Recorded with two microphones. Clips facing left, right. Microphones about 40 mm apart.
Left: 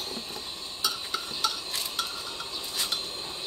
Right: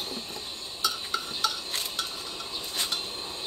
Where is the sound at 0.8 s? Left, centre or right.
Centre.